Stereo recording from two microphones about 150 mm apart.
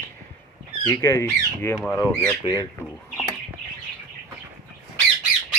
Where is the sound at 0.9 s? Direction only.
20° left (ahead or behind).